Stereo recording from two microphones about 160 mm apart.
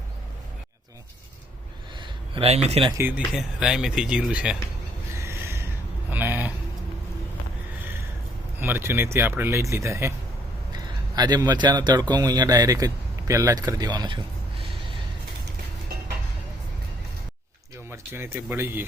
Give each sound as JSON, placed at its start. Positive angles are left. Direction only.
{"t": 2.0, "sound": "a sound", "side_deg": -35}
{"t": 2.6, "sound": "speech", "side_deg": -40}
{"t": 3.0, "sound": "speech", "side_deg": -10}
{"t": 5.1, "sound": "a sound", "side_deg": -15}
{"t": 8.6, "sound": "speech", "side_deg": -15}
{"t": 17.9, "sound": "speech", "side_deg": -15}